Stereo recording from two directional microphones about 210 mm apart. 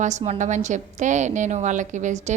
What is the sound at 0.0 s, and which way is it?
A woman's voice, 35° right (ahead or behind).